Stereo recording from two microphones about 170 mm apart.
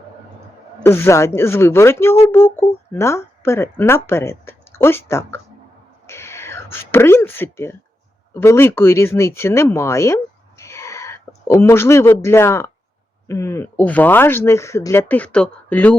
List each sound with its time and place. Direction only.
0.8 s speech: 15° left (ahead or behind)
6.1 s whispering: 15° left (ahead or behind)
8.3 s speech: 15° left (ahead or behind)
10.6 s a sound: 15° left (ahead or behind)
13.2 s speech: 15° left (ahead or behind)